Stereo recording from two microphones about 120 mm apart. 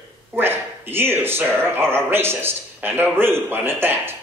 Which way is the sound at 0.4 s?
20° right (ahead or behind).